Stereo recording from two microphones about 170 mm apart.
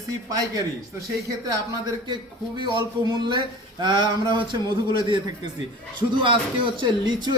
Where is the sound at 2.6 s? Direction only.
25° right (ahead or behind).